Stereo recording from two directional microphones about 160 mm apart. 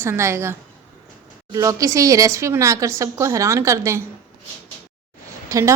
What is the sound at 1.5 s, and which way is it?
A woman's voice, 20° right (ahead or behind).